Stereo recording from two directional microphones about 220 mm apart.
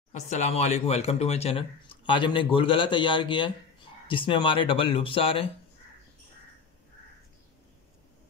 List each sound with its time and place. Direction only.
0.1 s speech: 30° left (ahead or behind)